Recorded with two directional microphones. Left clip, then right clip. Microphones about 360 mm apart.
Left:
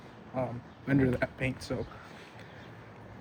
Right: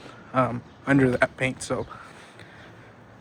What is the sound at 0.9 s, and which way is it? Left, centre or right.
Speech, centre.